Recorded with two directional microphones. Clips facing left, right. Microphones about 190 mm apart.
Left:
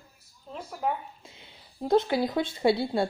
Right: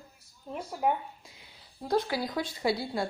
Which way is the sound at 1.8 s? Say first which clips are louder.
Left 5 dB; 25° left (ahead or behind).